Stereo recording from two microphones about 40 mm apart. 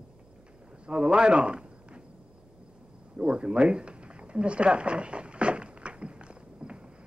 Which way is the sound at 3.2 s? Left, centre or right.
Right.